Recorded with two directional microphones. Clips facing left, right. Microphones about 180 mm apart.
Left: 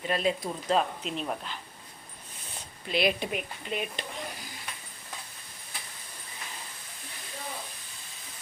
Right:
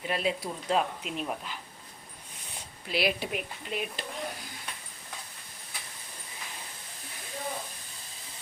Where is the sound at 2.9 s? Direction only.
5° right (ahead or behind).